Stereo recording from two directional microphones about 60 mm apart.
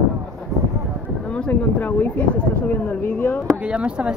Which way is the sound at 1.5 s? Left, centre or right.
Left.